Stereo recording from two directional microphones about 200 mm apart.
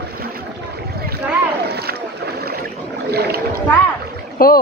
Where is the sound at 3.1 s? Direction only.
55° right (ahead or behind).